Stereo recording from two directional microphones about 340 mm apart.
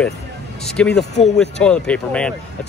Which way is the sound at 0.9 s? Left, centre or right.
Left.